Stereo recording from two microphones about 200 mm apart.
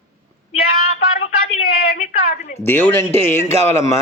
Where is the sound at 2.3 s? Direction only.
35° left (ahead or behind).